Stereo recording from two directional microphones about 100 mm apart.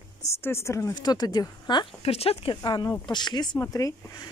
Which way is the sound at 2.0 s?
85° left.